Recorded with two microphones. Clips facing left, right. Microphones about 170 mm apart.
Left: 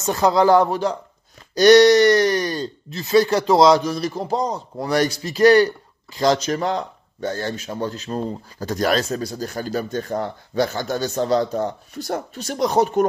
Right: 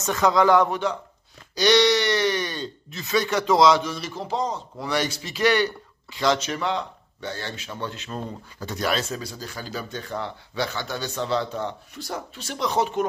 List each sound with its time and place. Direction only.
0.0 s speech: 35° left (ahead or behind)
1.5 s speech: 45° left (ahead or behind)